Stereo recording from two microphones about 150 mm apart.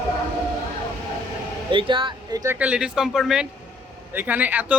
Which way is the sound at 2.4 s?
10° right (ahead or behind).